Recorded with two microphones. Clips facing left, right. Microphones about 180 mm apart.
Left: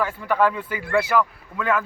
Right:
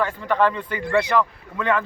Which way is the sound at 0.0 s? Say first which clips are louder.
Right 1 dB; 10° left (ahead or behind).